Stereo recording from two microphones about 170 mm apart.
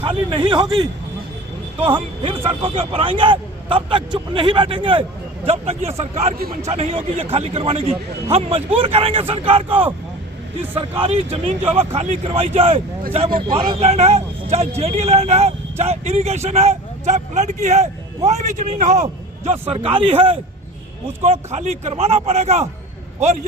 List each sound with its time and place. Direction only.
0.0 s a man's voice: 30° right (ahead or behind)
11.0 s a man's voice: 35° right (ahead or behind)
19.5 s speech: 35° right (ahead or behind)